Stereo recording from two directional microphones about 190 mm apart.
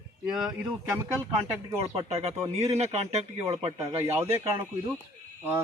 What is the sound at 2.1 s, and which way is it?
Speech, 35° right (ahead or behind).